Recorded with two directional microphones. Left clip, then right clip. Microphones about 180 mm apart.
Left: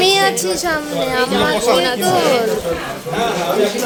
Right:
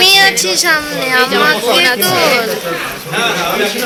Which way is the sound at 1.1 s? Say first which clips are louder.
Right 6 dB; 10° right (ahead or behind).